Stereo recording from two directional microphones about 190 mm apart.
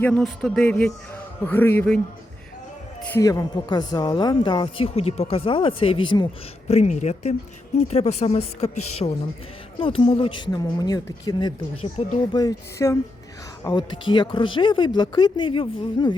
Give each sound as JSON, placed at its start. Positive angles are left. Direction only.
{"t": 0.0, "sound": "music", "side_deg": 5}
{"t": 1.4, "sound": "a man's voice", "side_deg": 10}
{"t": 3.0, "sound": "a woman's voice", "side_deg": 15}
{"t": 6.7, "sound": "a woman's voice", "side_deg": 35}